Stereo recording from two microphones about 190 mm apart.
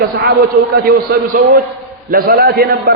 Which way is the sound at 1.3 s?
45° right (ahead or behind).